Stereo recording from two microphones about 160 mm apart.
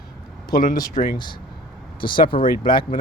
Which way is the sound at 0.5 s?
65° left (ahead or behind).